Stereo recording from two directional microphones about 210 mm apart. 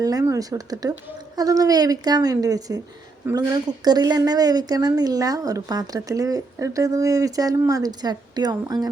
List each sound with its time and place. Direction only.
0.0 s a woman's voice: 15° right (ahead or behind)